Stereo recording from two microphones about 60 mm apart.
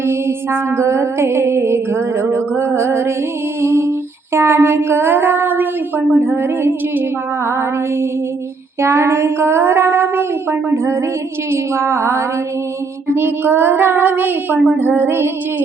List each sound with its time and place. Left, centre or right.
0.0 s music: right
4.4 s child singing: right
8.8 s music: right
13.1 s child singing: right